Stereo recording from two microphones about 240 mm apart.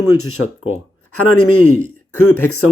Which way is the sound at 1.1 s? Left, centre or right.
Left.